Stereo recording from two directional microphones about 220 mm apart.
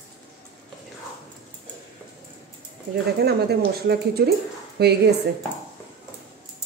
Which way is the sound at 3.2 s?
45° right (ahead or behind).